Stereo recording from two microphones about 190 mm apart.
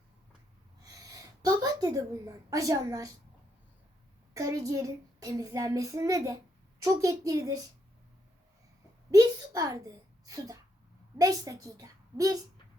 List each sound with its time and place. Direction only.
0.8 s a woman's voice: 20° right (ahead or behind)
4.4 s child singing: 15° right (ahead or behind)
9.1 s a woman's voice: 20° right (ahead or behind)
11.2 s child singing: 20° right (ahead or behind)